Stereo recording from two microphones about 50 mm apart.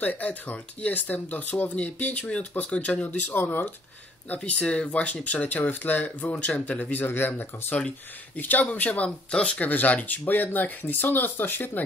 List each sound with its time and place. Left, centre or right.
0.0 s speech: left
3.3 s speech: left
4.5 s speech: left
8.4 s speech: left
9.3 s speech: left
9.7 s speech: left